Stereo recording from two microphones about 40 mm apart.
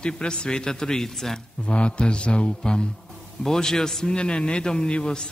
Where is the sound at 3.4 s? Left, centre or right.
Centre.